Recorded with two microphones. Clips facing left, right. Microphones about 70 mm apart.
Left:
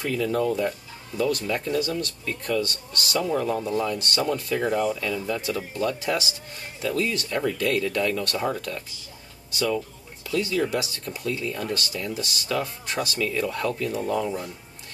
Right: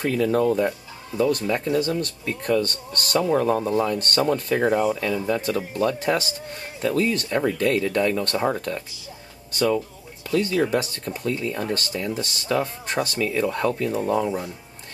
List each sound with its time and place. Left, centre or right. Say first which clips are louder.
0.0 s speech: right 4 dB; right
10.2 s speech: right 3 dB; right
11.1 s speech: right 3 dB; right